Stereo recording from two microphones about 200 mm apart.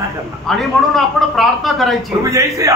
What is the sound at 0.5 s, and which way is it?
A man's voice, centre (ahead or behind).